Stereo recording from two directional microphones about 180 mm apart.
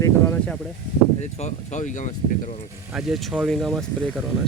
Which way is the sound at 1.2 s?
40° left (ahead or behind).